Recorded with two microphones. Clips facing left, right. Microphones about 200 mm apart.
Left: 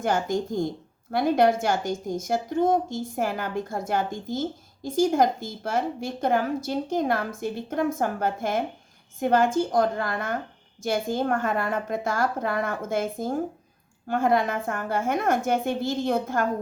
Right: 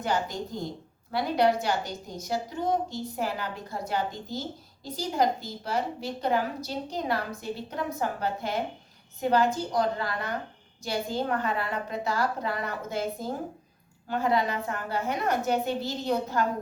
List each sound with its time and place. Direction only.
0.0 s a woman's voice: 50° left (ahead or behind)